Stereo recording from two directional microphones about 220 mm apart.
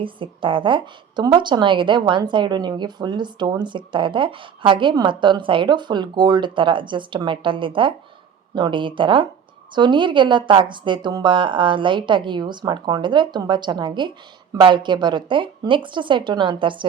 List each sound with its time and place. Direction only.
0.0 s a woman's voice: 20° right (ahead or behind)